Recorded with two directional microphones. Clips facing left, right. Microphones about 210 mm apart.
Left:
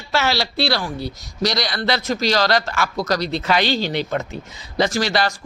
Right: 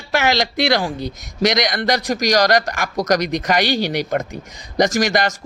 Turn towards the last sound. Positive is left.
turn(degrees=-15)  # may be behind; listen again after turning